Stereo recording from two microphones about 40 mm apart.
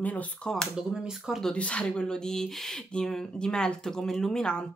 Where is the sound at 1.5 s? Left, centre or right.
Left.